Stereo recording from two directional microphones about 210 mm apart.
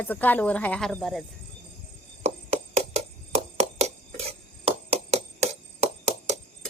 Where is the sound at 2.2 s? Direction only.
30° right (ahead or behind).